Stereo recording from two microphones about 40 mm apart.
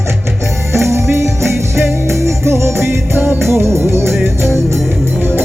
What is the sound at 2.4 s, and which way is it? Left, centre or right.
Music, right.